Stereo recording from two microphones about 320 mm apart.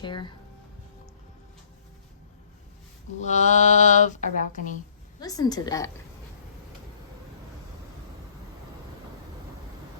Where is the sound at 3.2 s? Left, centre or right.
Left.